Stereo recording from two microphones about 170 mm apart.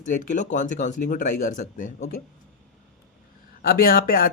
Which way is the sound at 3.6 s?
60° left (ahead or behind).